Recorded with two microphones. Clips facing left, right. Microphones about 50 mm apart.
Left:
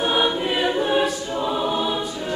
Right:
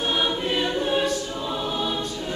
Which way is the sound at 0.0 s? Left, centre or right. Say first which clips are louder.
Left 4 dB; centre.